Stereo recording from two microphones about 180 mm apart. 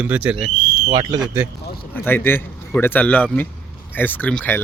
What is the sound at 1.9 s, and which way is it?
Speech, 10° left (ahead or behind).